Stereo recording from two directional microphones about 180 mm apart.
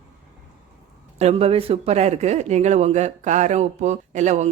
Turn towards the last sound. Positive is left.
turn(degrees=-40)  # may be behind; listen again after turning